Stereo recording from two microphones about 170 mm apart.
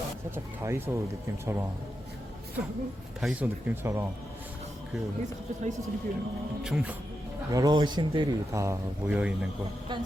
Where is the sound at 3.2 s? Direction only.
Centre (ahead or behind).